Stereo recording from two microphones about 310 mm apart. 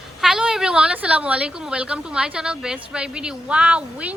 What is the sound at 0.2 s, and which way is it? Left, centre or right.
A woman's voice, centre.